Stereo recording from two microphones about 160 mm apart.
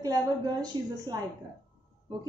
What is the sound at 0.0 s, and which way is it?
A woman's voice, 25° right (ahead or behind).